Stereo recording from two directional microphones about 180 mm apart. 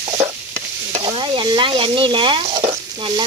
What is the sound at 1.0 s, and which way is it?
Frying, 25° right (ahead or behind).